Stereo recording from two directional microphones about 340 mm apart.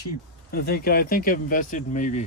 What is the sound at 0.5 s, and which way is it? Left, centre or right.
Speech, left.